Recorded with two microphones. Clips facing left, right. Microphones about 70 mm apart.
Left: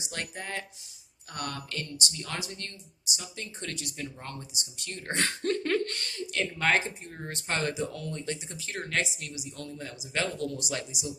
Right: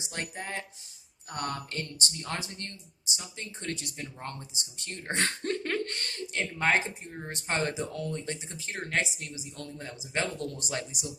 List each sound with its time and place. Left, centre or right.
0.0 s speech: right
1.3 s speech: right
5.6 s a sound: centre
6.3 s speech: centre
10.4 s speech: right